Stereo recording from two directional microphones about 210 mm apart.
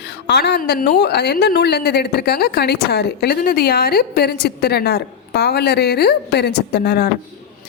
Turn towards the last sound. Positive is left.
turn(degrees=50)  # may be behind; listen again after turning